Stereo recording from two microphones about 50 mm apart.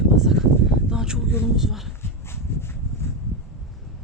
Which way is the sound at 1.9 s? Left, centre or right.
Left.